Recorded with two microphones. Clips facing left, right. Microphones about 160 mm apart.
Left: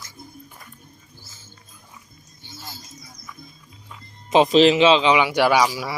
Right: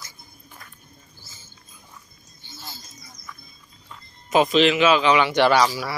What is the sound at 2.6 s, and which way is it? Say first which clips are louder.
Bird: left 1 dB; 10° left (ahead or behind).